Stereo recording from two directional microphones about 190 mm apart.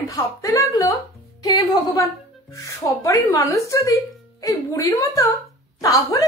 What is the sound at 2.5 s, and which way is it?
Speech, 15° left (ahead or behind).